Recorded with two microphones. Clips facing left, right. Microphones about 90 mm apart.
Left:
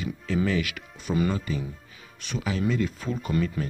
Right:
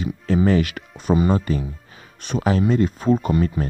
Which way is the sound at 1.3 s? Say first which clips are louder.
Right 8 dB; 50° right (ahead or behind).